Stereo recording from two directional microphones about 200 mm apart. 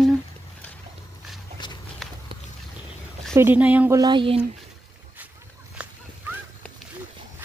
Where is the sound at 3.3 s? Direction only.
10° right (ahead or behind).